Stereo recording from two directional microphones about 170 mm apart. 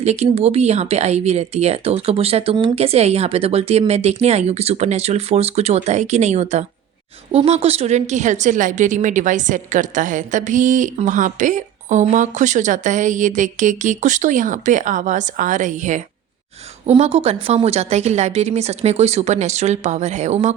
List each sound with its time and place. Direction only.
0.0 s a woman's voice: 40° right (ahead or behind)